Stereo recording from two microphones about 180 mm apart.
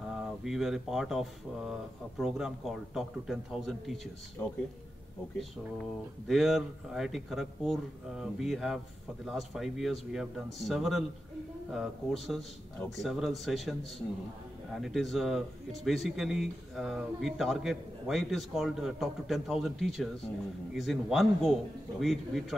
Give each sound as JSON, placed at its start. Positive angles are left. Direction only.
{"t": 0.1, "sound": "speech", "side_deg": 0}
{"t": 4.4, "sound": "speech", "side_deg": 20}
{"t": 5.4, "sound": "speech", "side_deg": 0}